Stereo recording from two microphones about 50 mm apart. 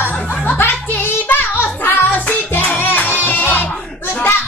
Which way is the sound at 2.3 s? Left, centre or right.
Left.